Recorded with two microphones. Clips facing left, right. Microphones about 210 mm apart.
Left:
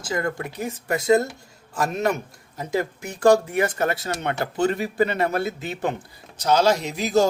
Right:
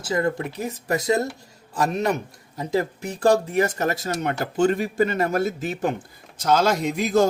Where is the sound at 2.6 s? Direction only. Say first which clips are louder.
Right 2 dB; 35° right (ahead or behind).